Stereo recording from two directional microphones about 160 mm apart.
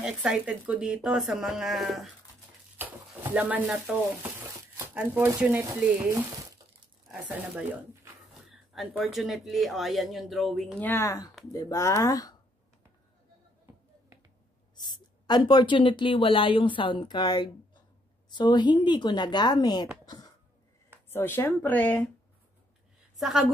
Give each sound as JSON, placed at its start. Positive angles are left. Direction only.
{"t": 0.0, "sound": "speech", "side_deg": -5}
{"t": 7.1, "sound": "speech", "side_deg": -10}
{"t": 10.9, "sound": "speech", "side_deg": 15}
{"t": 14.8, "sound": "speech", "side_deg": 25}
{"t": 20.1, "sound": "a sound", "side_deg": 25}
{"t": 21.1, "sound": "speech", "side_deg": 15}
{"t": 23.1, "sound": "a woman's voice", "side_deg": -5}